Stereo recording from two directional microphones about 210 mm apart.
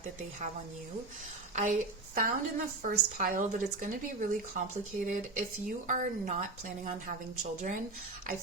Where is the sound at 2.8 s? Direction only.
40° right (ahead or behind).